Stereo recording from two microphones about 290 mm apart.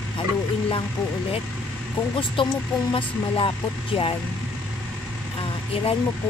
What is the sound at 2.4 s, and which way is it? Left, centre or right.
Speech, centre.